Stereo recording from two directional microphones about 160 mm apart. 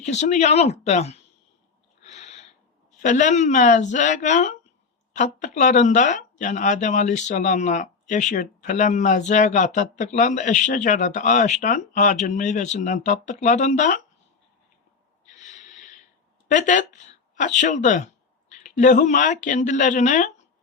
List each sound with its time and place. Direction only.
0.0 s speech: 45° left (ahead or behind)
2.0 s a sound: 45° left (ahead or behind)
3.0 s speech: 50° left (ahead or behind)
15.4 s gasp: 50° left (ahead or behind)
16.5 s speech: 50° left (ahead or behind)